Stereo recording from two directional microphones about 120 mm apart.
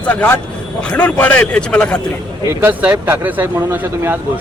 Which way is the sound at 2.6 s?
15° right (ahead or behind).